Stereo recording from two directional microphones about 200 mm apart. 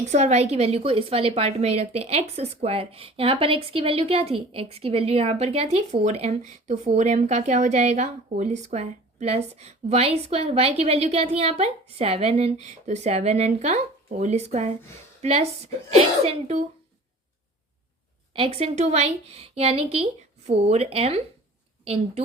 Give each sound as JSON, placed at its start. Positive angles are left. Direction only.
{"t": 0.1, "sound": "a woman's voice", "side_deg": -35}
{"t": 18.3, "sound": "a woman's voice", "side_deg": -25}